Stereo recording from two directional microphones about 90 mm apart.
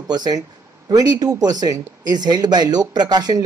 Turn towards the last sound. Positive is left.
turn(degrees=-50)  # may be behind; listen again after turning